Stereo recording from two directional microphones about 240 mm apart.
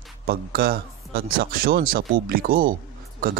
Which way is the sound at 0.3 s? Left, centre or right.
Right.